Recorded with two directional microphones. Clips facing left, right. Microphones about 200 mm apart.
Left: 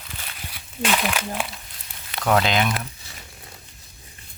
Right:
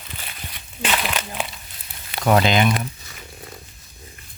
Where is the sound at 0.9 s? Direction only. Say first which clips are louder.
Left 1 dB; centre (ahead or behind).